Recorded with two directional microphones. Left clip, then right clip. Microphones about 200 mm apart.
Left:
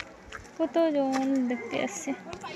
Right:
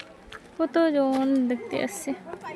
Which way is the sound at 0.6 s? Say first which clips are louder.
Right 3 dB; 35° right (ahead or behind).